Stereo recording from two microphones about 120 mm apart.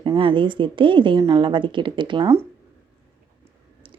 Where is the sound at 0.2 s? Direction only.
45° right (ahead or behind).